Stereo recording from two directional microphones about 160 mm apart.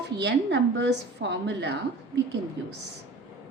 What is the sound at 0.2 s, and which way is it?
A woman's voice, 90° right.